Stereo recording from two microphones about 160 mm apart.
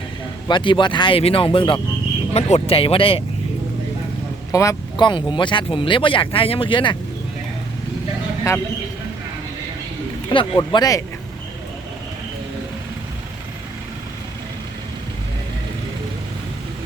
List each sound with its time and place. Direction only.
0.4 s speech: 30° left (ahead or behind)
4.5 s speech: 20° left (ahead or behind)
8.5 s speech: 20° left (ahead or behind)
10.2 s speech: 30° left (ahead or behind)